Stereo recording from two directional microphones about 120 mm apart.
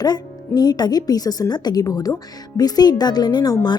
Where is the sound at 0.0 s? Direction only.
35° left (ahead or behind).